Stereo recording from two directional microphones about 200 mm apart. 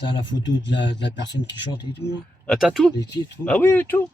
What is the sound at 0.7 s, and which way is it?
Speech, 60° left (ahead or behind).